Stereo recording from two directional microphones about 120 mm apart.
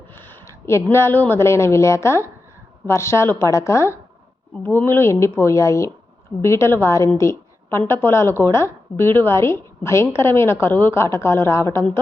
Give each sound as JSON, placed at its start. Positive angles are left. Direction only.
{"t": 0.1, "sound": "a woman's voice", "side_deg": 20}